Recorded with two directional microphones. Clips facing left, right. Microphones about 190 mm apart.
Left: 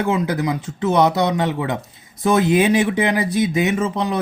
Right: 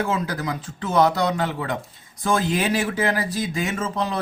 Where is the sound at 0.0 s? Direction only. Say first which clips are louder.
Left 5 dB; 20° left (ahead or behind).